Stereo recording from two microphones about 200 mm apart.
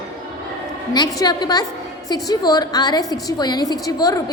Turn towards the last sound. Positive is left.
turn(degrees=20)  # may be behind; listen again after turning